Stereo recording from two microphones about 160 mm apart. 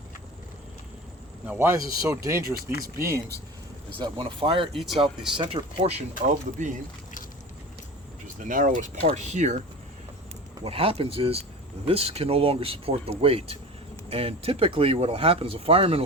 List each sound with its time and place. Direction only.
1.5 s speech: 15° right (ahead or behind)
4.0 s speech: 30° right (ahead or behind)
4.7 s speech: centre (ahead or behind)
5.4 s speech: 35° right (ahead or behind); by 6.7 s 50° right (ahead or behind)
8.4 s speech: 55° right (ahead or behind)
10.6 s speech: 35° right (ahead or behind)